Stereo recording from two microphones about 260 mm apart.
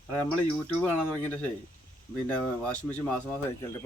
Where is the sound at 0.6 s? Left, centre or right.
Centre.